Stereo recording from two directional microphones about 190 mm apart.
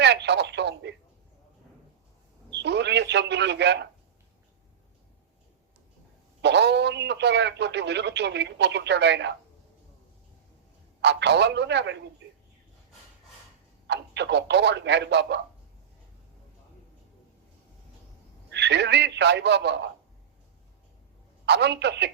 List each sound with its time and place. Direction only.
0.0 s speech: 65° right (ahead or behind)
2.6 s speech: 65° right (ahead or behind)
6.4 s speech: 65° right (ahead or behind)
11.0 s speech: 65° right (ahead or behind)
13.8 s speech: 65° right (ahead or behind)
18.5 s speech: 65° right (ahead or behind)
21.4 s speech: 65° right (ahead or behind)